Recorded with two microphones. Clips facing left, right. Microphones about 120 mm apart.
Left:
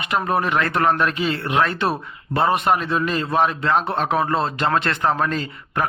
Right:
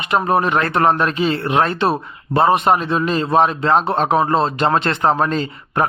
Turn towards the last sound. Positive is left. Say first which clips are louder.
# right 5 dB
turn(degrees=-30)  # may be behind; listen again after turning